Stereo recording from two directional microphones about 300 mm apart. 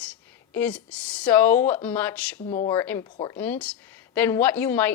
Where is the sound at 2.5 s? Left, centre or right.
Left.